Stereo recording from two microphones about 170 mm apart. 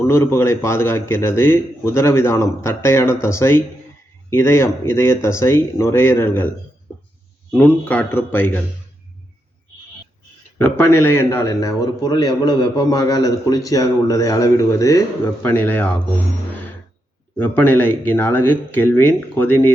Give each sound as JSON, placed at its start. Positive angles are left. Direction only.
{"t": 0.0, "sound": "a man's voice", "side_deg": 15}
{"t": 6.9, "sound": "a sound", "side_deg": 10}
{"t": 7.5, "sound": "a man's voice", "side_deg": 10}
{"t": 10.6, "sound": "speech", "side_deg": 15}
{"t": 17.3, "sound": "a man's voice", "side_deg": 10}